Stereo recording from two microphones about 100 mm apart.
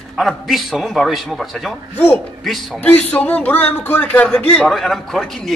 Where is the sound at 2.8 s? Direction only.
15° left (ahead or behind).